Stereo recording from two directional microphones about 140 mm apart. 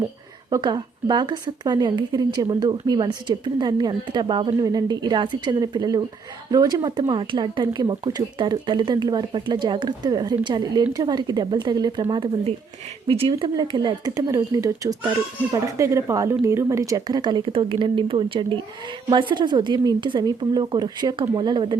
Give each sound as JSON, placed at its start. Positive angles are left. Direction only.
{"t": 0.5, "sound": "a woman's voice", "side_deg": -30}
{"t": 13.1, "sound": "a woman's voice", "side_deg": -40}